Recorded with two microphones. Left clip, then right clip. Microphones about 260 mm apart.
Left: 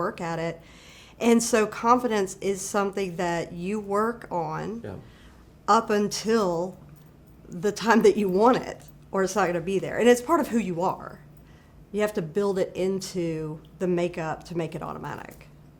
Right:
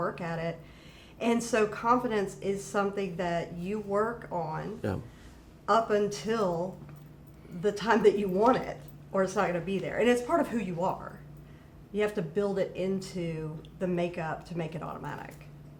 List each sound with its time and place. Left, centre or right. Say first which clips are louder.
0.0 s a woman's voice: left 4 dB; left